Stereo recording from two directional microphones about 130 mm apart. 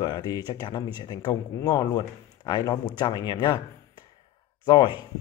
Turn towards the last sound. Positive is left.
turn(degrees=35)  # may be behind; listen again after turning